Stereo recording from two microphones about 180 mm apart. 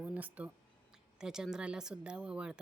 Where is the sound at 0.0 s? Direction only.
10° right (ahead or behind).